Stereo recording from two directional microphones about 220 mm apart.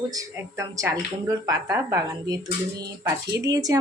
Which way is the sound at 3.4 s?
15° right (ahead or behind).